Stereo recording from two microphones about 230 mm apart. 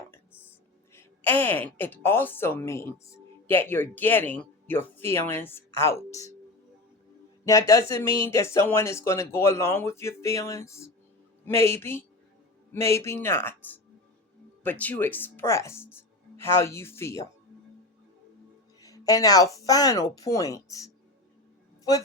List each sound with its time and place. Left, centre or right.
0.9 s a woman's voice: centre
7.4 s a woman's voice: centre
18.8 s music: centre
19.5 s a woman's voice: centre